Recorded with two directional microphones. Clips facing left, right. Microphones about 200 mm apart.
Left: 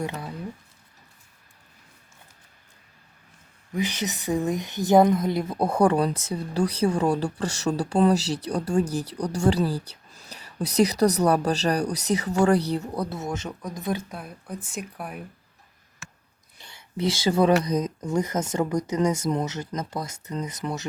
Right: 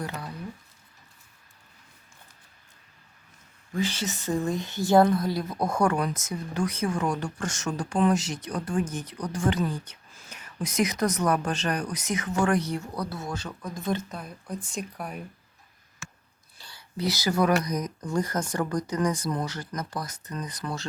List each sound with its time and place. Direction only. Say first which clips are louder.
0.0 s speech: left 4 dB; 25° left (ahead or behind)
3.7 s speech: left 1 dB; 15° left (ahead or behind)
16.6 s speech: left 4 dB; 20° left (ahead or behind)